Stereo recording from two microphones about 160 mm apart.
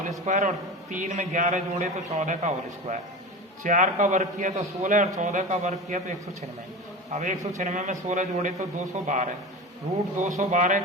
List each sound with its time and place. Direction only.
0.3 s a man's voice: 50° right (ahead or behind)
3.6 s a man's voice: 55° right (ahead or behind)